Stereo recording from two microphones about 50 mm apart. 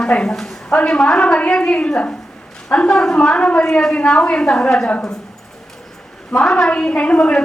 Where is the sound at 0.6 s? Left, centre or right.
Centre.